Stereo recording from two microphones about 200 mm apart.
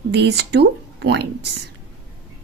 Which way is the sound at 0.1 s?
55° right (ahead or behind).